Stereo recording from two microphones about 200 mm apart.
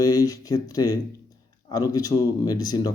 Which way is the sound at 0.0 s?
15° left (ahead or behind).